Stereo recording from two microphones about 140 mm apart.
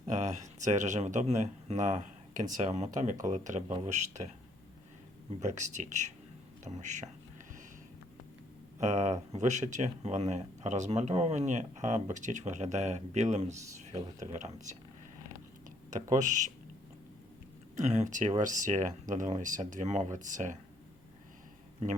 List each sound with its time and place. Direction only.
0.0 s speech: 60° right (ahead or behind)
5.4 s speech: 60° right (ahead or behind)
8.8 s speech: 55° right (ahead or behind)
16.1 s speech: 65° right (ahead or behind)
17.7 s speech: 55° right (ahead or behind)